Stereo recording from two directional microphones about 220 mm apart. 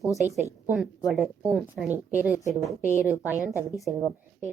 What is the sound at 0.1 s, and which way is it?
Speech, 15° left (ahead or behind).